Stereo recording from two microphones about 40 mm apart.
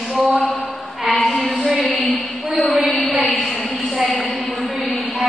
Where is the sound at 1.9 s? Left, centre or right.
Left.